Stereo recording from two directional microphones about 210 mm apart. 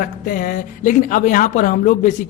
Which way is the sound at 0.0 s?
40° left (ahead or behind).